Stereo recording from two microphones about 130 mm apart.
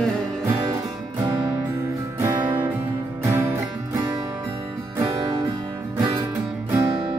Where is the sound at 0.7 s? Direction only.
25° right (ahead or behind).